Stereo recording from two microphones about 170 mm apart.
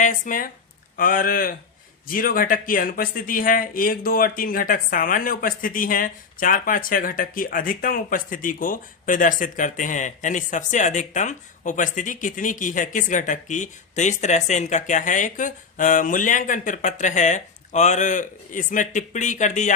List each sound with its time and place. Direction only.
0.0 s speech: 50° left (ahead or behind)